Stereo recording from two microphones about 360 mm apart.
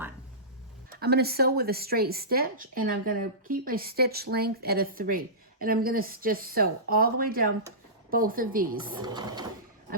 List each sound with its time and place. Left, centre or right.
0.9 s speech: right
8.8 s speech: centre